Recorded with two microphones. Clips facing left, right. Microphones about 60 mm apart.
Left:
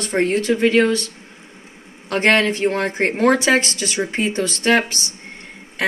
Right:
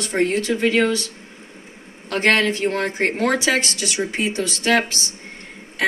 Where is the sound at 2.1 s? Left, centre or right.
Left.